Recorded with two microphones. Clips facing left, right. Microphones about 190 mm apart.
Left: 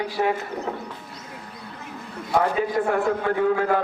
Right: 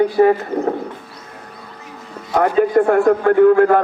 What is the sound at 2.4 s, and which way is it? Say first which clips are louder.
A man's voice: right 8 dB; 60° right (ahead or behind).